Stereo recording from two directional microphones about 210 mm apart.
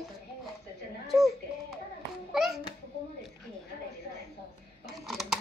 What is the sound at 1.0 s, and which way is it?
A child's voice, centre (ahead or behind).